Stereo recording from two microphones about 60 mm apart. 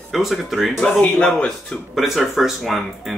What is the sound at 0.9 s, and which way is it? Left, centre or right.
Speech, left.